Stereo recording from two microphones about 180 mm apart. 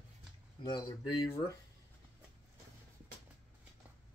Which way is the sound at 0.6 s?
25° left (ahead or behind).